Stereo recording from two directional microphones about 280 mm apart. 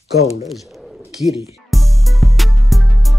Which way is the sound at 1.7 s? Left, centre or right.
Centre.